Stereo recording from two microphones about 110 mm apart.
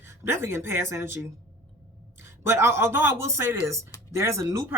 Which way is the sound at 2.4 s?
25° right (ahead or behind).